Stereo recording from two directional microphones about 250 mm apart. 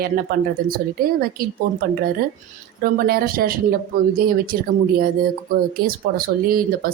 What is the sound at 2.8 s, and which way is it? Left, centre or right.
A woman's voice, right.